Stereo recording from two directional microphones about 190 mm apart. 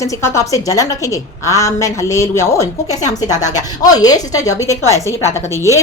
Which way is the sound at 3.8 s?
20° left (ahead or behind).